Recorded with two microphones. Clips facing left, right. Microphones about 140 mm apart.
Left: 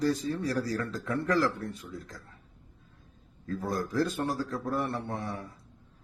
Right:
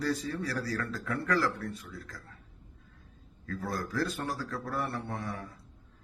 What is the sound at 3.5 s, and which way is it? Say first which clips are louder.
Speech: left 3 dB; 20° left (ahead or behind).